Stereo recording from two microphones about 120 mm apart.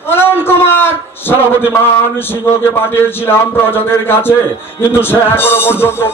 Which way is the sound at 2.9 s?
20° left (ahead or behind).